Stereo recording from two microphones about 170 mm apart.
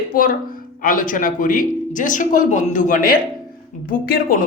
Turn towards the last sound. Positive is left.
turn(degrees=60)  # may be behind; listen again after turning